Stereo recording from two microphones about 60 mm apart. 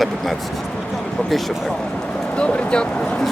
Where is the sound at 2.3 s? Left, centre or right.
Centre.